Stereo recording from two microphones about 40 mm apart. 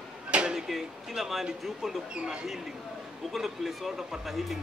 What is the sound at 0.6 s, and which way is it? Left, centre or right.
Speech, centre.